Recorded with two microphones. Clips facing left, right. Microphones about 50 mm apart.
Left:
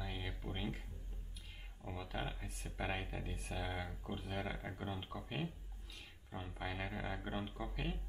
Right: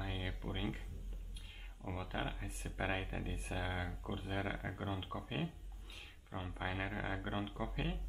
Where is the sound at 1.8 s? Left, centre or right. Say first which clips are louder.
Right 2 dB; centre.